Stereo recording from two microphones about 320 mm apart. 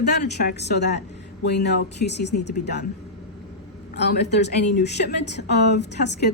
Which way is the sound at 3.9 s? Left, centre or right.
Left.